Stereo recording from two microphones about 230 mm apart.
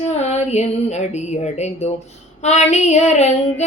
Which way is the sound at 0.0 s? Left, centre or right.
Left.